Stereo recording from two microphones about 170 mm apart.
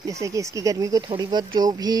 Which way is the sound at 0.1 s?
20° right (ahead or behind).